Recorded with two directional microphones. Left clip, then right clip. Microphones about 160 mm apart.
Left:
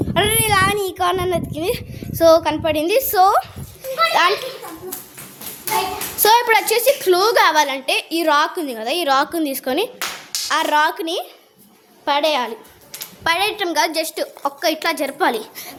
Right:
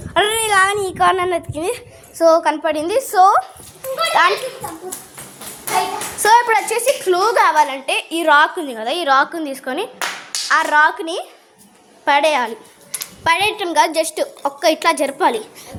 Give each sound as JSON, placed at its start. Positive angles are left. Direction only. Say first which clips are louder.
{"t": 0.1, "sound": "speech", "louder": "right 2 dB", "side_deg": 0}
{"t": 1.7, "sound": "a woman's voice", "louder": "left 2 dB", "side_deg": 15}
{"t": 3.9, "sound": "a sound", "louder": "right 1 dB", "side_deg": 15}
{"t": 6.1, "sound": "a woman's voice", "louder": "right 1 dB", "side_deg": 20}
{"t": 11.0, "sound": "a woman's voice", "louder": "left 1 dB", "side_deg": 10}
{"t": 12.0, "sound": "a woman's voice", "louder": "right 3 dB", "side_deg": 0}
{"t": 15.2, "sound": "a woman's voice", "louder": "even", "side_deg": 20}